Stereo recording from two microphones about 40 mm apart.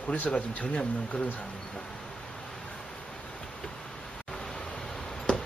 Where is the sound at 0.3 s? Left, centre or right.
Left.